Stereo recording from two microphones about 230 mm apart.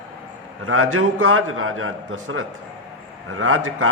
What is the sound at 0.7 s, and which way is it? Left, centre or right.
A man's voice, right.